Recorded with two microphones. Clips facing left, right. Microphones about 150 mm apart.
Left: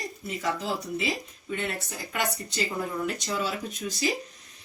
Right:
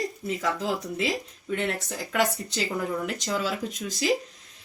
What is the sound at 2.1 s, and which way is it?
Speech, 90° right.